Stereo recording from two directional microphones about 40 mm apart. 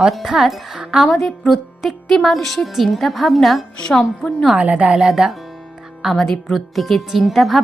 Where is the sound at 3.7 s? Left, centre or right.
Centre.